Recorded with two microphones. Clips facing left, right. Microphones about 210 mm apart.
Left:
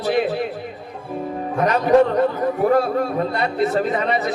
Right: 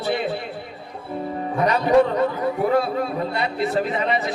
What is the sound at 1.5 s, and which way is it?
Speech, 45° left (ahead or behind).